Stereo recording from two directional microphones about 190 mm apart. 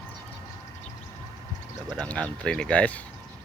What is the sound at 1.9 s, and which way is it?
Speech, 5° left (ahead or behind).